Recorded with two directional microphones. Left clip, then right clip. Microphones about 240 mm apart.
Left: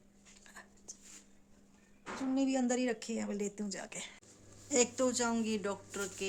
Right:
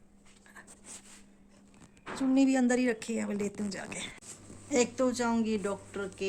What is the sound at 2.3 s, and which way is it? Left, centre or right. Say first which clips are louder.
Speech: right 6 dB; centre.